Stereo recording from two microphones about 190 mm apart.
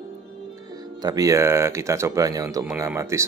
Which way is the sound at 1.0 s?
20° right (ahead or behind).